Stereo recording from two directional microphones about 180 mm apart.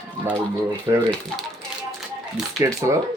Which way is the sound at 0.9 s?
20° right (ahead or behind).